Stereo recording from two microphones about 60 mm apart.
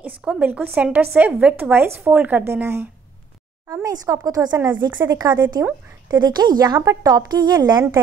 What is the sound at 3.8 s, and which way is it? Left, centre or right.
A woman's voice, right.